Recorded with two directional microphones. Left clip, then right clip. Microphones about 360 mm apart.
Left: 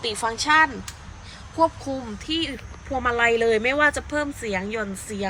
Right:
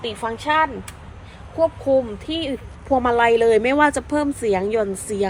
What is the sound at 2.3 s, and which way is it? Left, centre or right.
A woman's voice, centre.